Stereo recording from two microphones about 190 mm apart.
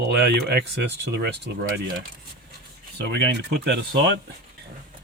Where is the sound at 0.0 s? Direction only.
60° right (ahead or behind).